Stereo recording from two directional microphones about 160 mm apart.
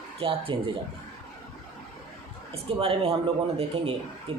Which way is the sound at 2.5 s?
35° right (ahead or behind).